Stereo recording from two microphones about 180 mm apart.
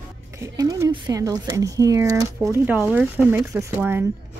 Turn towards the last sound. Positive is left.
turn(degrees=-10)  # may be behind; listen again after turning